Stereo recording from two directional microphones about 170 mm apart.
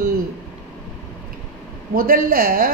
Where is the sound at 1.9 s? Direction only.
55° right (ahead or behind).